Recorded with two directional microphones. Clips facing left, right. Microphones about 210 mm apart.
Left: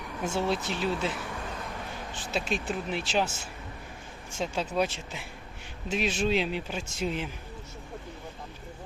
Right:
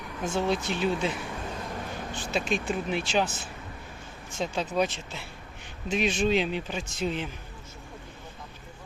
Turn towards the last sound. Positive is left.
turn(degrees=10)  # may be behind; listen again after turning